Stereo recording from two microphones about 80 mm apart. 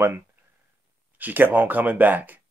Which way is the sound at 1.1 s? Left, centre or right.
Right.